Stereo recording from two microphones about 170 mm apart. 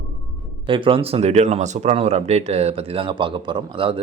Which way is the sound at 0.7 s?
30° right (ahead or behind).